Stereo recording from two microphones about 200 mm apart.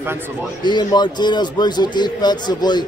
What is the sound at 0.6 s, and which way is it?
Speech, 20° left (ahead or behind).